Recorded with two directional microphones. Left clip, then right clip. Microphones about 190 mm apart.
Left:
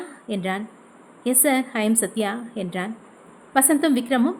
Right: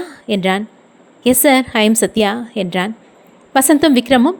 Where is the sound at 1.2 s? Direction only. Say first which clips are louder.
Right 10 dB; 40° right (ahead or behind).